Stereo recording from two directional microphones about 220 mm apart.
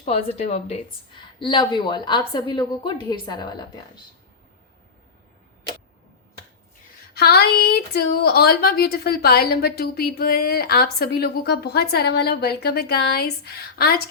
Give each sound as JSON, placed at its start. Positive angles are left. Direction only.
{"t": 0.0, "sound": "a woman's voice", "side_deg": 30}
{"t": 7.1, "sound": "a woman's voice", "side_deg": 45}